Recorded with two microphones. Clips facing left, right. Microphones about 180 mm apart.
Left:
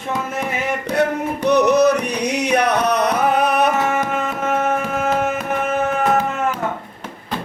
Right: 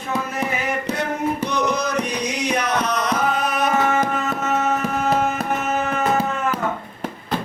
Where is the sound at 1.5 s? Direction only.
65° left (ahead or behind).